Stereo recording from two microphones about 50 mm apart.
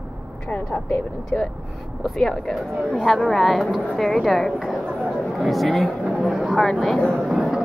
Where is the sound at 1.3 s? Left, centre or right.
Left.